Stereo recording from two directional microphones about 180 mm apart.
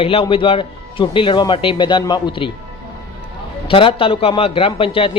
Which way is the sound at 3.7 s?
30° left (ahead or behind).